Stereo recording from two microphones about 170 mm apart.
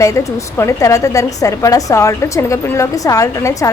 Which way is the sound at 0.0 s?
20° left (ahead or behind).